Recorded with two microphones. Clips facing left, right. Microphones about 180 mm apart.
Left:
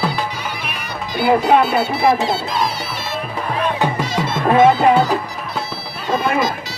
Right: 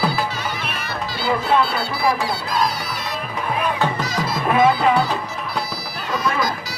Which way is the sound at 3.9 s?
25° left (ahead or behind).